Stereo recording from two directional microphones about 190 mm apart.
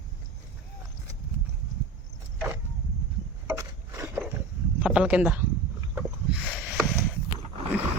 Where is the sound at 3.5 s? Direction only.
15° right (ahead or behind).